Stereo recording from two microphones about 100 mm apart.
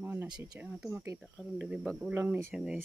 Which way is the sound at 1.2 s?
5° right (ahead or behind).